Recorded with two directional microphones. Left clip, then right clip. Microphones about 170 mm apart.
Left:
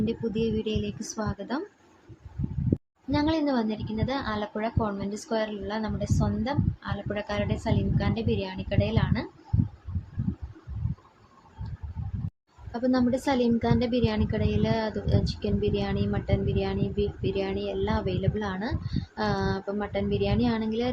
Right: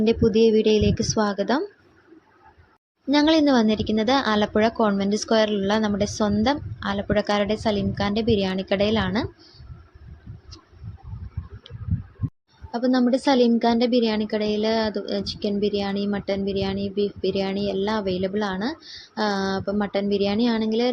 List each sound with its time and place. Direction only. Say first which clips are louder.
0.0 s a woman's voice: right 11 dB; 45° right (ahead or behind)
3.1 s a woman's voice: right 8 dB; 40° right (ahead or behind)
12.7 s a woman's voice: right 5 dB; 25° right (ahead or behind)